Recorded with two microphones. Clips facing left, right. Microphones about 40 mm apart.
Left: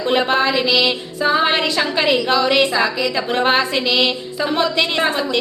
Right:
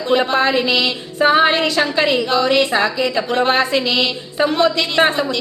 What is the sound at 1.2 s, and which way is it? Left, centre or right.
Music, right.